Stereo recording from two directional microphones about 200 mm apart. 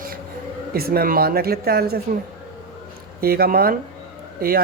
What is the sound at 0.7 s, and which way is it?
Speech, 50° right (ahead or behind).